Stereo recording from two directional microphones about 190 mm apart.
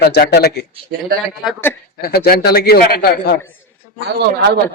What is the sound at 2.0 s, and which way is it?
A man's voice, 55° left (ahead or behind).